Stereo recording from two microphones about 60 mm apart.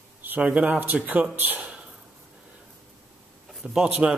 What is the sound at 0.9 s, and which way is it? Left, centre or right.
Speech, right.